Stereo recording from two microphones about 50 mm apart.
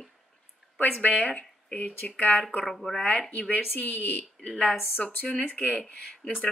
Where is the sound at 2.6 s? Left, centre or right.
Centre.